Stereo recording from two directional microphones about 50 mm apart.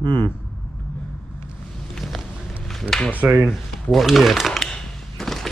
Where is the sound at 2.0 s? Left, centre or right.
Centre.